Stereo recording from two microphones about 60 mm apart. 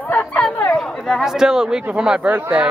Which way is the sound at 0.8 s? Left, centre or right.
Centre.